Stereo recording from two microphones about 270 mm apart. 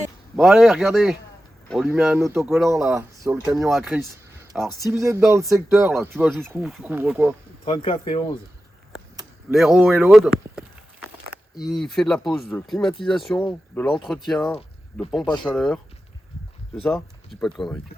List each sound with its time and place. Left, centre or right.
0.3 s speech: centre
4.9 s speech: centre
5.7 s speech: centre
7.6 s speech: centre
9.5 s speech: centre
11.6 s speech: centre